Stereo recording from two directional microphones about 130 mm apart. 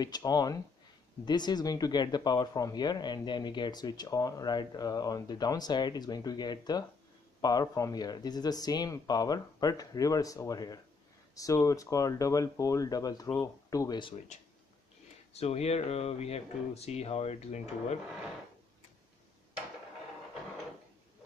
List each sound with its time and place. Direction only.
0.0 s speech: 30° left (ahead or behind)
15.3 s speech: 55° left (ahead or behind)